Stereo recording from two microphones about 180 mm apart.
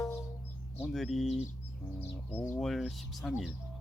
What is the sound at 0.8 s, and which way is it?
Speech, centre (ahead or behind).